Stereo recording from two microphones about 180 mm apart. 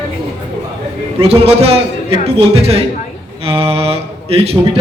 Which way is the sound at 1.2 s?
35° right (ahead or behind).